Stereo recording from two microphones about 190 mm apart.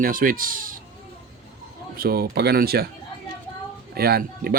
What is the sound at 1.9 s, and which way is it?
Speech, 50° right (ahead or behind).